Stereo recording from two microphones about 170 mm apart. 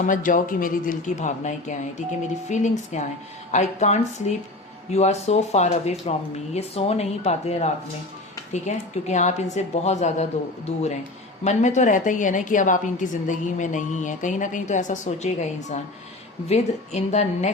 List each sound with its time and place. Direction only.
0.0 s a woman's voice: 50° left (ahead or behind)
11.4 s a woman's voice: 45° left (ahead or behind)